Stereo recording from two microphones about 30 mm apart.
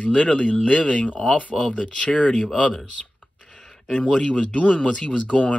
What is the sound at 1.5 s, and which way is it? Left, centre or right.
Speech, centre.